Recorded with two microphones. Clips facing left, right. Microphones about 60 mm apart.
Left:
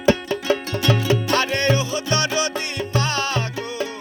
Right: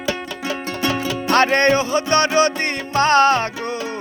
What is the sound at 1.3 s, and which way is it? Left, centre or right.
Music, right.